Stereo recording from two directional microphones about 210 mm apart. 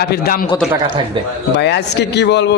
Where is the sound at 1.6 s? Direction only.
55° left (ahead or behind).